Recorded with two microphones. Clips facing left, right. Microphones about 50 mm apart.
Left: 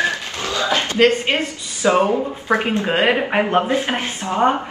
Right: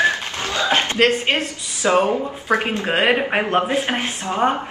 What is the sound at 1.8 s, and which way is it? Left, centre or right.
Speech, centre.